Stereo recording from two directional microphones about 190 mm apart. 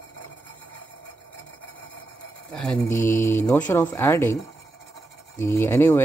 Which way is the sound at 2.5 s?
5° left (ahead or behind).